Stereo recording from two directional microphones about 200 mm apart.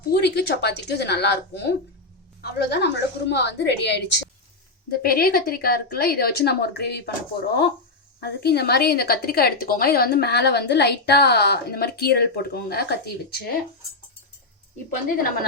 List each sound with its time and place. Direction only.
0.1 s a woman's voice: 55° left (ahead or behind)
5.0 s a woman's voice: 45° left (ahead or behind)
14.8 s a woman's voice: 45° left (ahead or behind)